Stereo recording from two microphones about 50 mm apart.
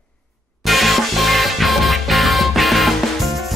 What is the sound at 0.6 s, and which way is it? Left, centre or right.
Music, centre.